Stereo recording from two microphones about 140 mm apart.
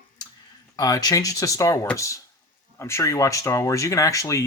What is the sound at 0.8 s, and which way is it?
Speech, 25° left (ahead or behind).